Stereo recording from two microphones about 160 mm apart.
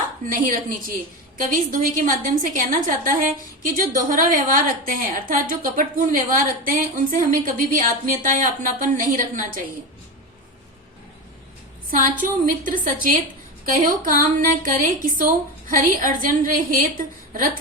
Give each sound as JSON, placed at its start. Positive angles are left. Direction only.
{"t": 0.3, "sound": "a woman's voice", "side_deg": -60}
{"t": 12.5, "sound": "a woman's voice", "side_deg": -55}